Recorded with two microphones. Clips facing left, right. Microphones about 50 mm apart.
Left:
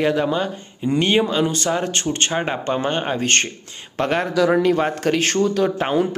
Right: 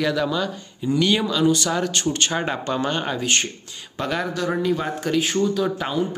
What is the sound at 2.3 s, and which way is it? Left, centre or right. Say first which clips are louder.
Speech: left 2 dB; left.